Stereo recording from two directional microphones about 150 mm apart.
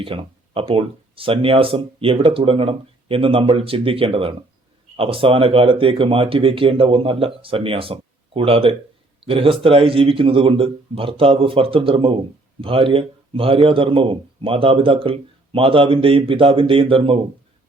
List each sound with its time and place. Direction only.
0.0 s a man's voice: 35° right (ahead or behind)